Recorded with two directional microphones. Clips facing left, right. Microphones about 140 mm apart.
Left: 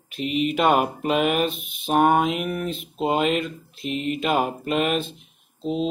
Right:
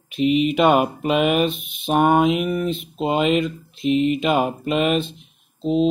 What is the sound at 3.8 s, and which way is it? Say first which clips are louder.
Speech: right 8 dB; 45° left (ahead or behind).